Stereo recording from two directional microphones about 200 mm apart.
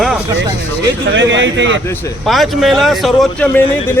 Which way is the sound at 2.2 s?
Centre (ahead or behind).